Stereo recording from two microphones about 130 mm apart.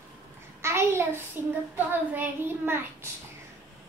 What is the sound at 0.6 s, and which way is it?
A child's voice, 20° right (ahead or behind).